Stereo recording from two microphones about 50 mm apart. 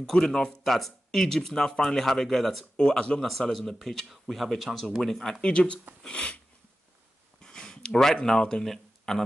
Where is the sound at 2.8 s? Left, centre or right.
Centre.